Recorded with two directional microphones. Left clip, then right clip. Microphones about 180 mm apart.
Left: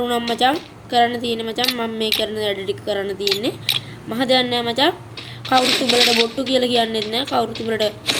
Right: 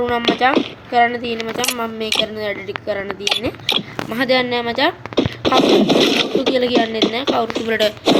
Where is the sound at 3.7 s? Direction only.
70° left (ahead or behind).